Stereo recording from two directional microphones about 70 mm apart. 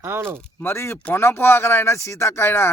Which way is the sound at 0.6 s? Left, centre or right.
Left.